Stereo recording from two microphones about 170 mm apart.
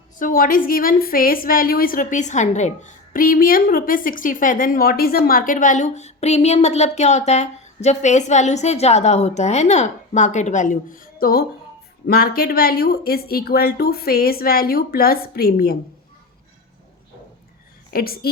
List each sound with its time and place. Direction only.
0.2 s a woman's voice: 55° left (ahead or behind)
17.9 s speech: 60° left (ahead or behind)